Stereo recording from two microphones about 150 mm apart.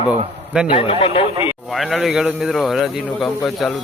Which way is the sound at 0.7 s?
40° left (ahead or behind).